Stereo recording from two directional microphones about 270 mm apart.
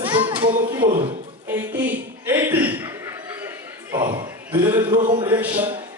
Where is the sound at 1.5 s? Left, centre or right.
Centre.